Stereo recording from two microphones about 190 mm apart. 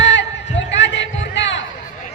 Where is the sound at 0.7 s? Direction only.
70° left (ahead or behind).